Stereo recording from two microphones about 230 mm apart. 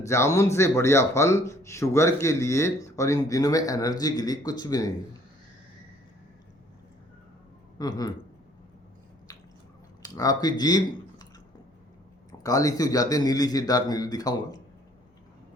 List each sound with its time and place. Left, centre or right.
0.0 s a man's voice: centre
7.8 s a man's voice: centre
10.0 s speech: centre
12.3 s a man's voice: centre